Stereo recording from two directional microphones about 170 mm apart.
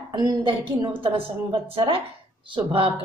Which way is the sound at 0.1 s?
30° right (ahead or behind).